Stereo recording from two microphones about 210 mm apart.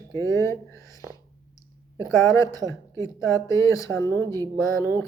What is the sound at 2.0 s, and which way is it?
A woman's voice, 15° left (ahead or behind).